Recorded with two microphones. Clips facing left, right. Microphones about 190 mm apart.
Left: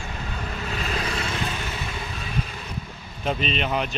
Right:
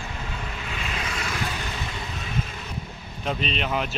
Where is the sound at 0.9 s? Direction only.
30° left (ahead or behind).